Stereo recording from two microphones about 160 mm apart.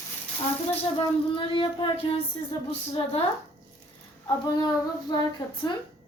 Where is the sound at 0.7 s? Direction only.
35° left (ahead or behind).